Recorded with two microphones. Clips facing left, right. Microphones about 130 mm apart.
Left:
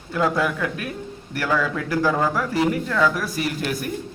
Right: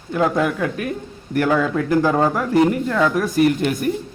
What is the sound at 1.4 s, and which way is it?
A man's voice, 20° right (ahead or behind).